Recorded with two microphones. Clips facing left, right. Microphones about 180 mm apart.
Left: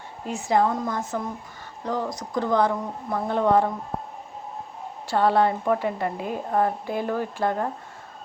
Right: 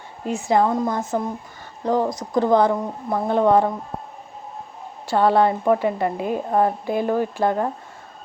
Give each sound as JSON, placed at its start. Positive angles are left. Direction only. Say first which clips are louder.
{"t": 0.3, "sound": "a woman's voice", "louder": "right 3 dB", "side_deg": -25}
{"t": 5.0, "sound": "a woman's voice", "louder": "right 3 dB", "side_deg": -20}